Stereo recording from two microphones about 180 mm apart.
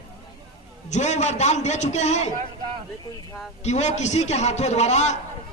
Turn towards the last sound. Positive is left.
turn(degrees=40)  # may be behind; listen again after turning